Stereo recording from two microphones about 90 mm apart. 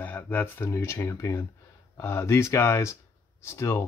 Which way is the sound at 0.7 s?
30° left (ahead or behind).